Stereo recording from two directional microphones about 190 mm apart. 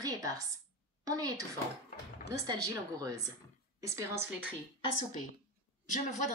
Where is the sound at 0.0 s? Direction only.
20° right (ahead or behind).